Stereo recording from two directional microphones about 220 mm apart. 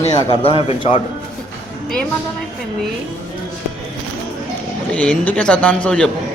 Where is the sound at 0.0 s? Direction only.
25° left (ahead or behind).